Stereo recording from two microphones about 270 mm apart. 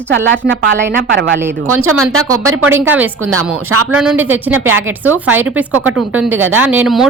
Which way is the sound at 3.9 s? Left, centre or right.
Centre.